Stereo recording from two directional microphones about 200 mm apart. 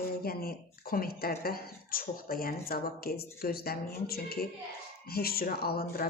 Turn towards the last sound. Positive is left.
turn(degrees=50)  # may be behind; listen again after turning